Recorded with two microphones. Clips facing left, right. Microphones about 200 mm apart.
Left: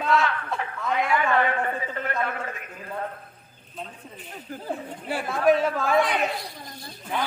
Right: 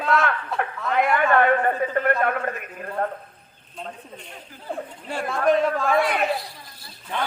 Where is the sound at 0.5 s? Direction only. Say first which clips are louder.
Right 5 dB; 60° right (ahead or behind).